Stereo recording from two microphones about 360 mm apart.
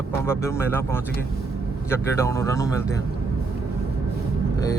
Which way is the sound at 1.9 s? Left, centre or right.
Centre.